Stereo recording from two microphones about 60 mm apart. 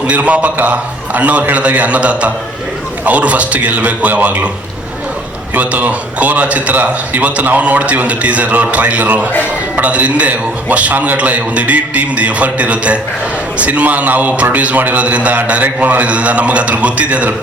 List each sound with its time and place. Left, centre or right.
0.1 s a man's voice: right
5.5 s a man's voice: right